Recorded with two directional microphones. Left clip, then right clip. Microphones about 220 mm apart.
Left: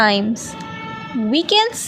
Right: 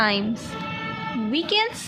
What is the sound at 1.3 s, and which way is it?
Speech, 30° left (ahead or behind).